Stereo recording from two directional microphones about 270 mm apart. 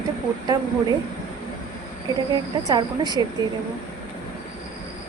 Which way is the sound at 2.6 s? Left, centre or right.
Centre.